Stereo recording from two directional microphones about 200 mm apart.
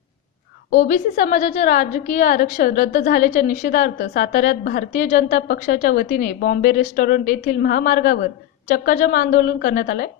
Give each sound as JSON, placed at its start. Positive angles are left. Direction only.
{"t": 0.7, "sound": "a woman's voice", "side_deg": 40}